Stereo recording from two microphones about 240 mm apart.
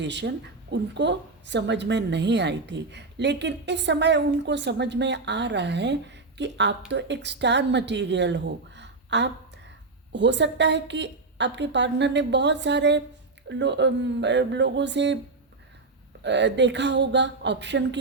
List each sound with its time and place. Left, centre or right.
0.0 s a woman's voice: right
16.2 s a woman's voice: right